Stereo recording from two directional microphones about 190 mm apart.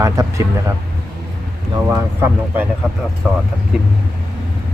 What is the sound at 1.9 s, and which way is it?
Speech, 10° right (ahead or behind).